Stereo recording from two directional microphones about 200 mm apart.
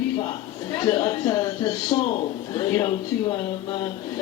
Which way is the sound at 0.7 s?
20° left (ahead or behind).